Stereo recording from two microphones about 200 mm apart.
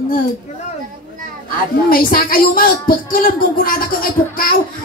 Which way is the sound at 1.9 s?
45° left (ahead or behind).